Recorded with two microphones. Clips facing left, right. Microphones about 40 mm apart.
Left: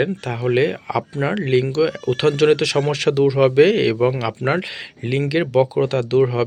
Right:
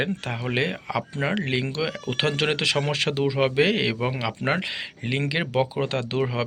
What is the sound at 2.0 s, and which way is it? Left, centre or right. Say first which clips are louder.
Speech: left 8 dB; right.